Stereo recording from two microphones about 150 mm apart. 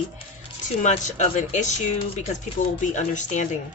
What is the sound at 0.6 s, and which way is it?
Speech, 55° left (ahead or behind).